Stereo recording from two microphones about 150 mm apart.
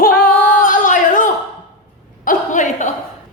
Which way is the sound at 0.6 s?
65° left (ahead or behind).